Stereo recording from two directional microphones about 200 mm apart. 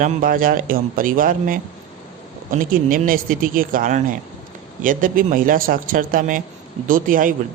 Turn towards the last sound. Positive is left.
turn(degrees=-45)  # may be behind; listen again after turning